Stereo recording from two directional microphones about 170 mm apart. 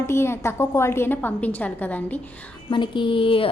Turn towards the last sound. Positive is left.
turn(degrees=30)  # may be behind; listen again after turning